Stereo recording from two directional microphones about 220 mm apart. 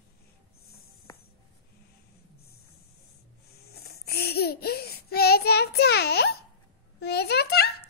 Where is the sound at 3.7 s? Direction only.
45° left (ahead or behind).